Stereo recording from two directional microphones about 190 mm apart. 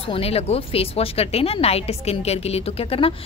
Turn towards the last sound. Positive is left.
turn(degrees=30)  # may be behind; listen again after turning